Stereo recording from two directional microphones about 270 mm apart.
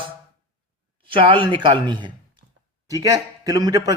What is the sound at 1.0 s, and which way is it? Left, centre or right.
Speech, centre.